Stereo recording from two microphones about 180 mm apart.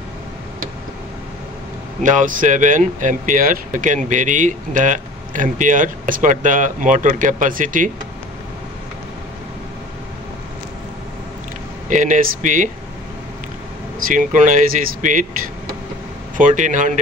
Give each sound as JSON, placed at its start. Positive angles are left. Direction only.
{"t": 2.0, "sound": "speech", "side_deg": -45}
{"t": 11.9, "sound": "speech", "side_deg": -45}
{"t": 14.0, "sound": "speech", "side_deg": -45}
{"t": 16.3, "sound": "speech", "side_deg": -45}